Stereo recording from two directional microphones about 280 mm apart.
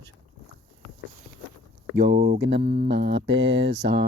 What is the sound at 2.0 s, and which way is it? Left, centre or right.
Speech, right.